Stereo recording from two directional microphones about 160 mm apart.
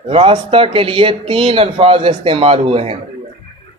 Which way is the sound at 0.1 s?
35° right (ahead or behind).